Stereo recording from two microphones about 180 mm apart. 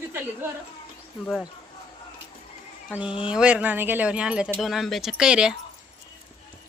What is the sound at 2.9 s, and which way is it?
Speech, 5° right (ahead or behind).